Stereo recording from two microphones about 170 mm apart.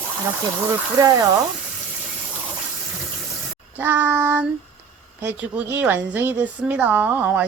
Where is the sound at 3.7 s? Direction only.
10° right (ahead or behind).